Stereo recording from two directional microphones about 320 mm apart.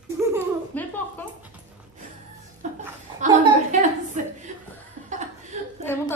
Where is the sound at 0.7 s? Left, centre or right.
Centre.